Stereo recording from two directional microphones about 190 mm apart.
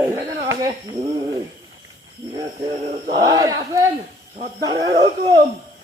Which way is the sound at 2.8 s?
40° right (ahead or behind).